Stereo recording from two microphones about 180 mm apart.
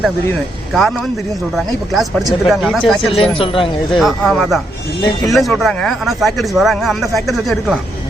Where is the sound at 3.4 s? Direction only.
30° left (ahead or behind).